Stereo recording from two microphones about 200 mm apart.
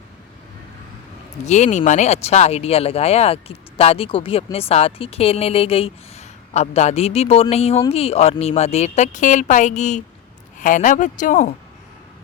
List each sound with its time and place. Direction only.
1.5 s speech: 35° left (ahead or behind)